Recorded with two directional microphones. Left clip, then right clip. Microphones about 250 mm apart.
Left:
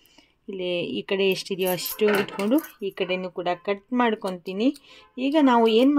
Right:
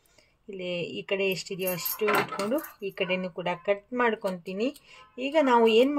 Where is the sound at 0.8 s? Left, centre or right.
Left.